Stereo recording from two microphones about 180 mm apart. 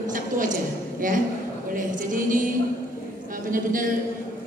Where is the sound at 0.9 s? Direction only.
50° right (ahead or behind).